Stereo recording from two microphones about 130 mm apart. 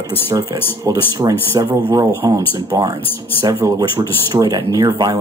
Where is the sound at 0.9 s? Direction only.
25° right (ahead or behind).